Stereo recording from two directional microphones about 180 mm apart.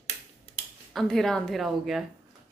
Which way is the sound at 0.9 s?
Centre (ahead or behind).